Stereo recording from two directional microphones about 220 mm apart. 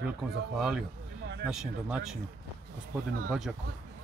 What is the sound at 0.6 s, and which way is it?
Speech, centre (ahead or behind).